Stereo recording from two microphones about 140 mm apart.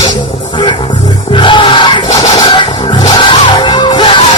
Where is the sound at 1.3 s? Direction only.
35° left (ahead or behind).